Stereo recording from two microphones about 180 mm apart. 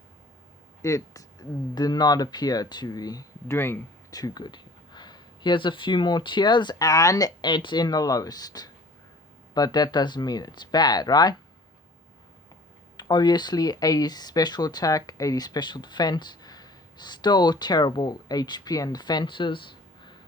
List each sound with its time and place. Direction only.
0.8 s speech: 15° left (ahead or behind)
13.0 s speech: 25° left (ahead or behind)